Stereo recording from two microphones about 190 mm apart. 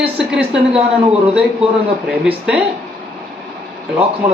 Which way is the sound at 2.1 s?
5° right (ahead or behind).